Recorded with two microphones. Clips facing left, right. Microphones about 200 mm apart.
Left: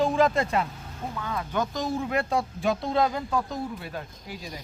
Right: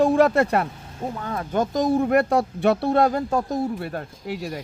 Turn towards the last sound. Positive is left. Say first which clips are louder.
# right 9 dB
turn(degrees=-70)  # may be behind; listen again after turning